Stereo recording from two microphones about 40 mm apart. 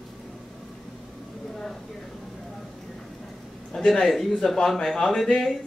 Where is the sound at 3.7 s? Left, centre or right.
Centre.